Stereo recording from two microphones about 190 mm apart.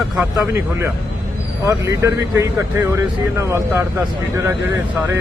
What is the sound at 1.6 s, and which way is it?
Speech, 15° right (ahead or behind).